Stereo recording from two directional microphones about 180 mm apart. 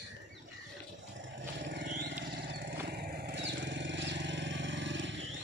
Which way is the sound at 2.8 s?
60° right (ahead or behind).